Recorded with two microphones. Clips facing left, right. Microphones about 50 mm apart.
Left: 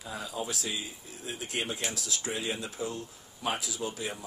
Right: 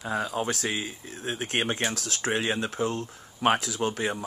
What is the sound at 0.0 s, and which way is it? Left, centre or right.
Speech, right.